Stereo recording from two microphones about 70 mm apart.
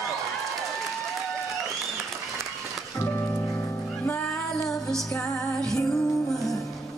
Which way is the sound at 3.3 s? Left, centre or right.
Left.